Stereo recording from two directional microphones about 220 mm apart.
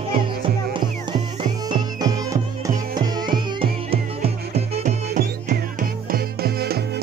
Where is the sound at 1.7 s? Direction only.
20° right (ahead or behind).